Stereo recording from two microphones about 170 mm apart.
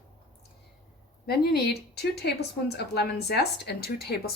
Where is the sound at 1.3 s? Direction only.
70° left (ahead or behind).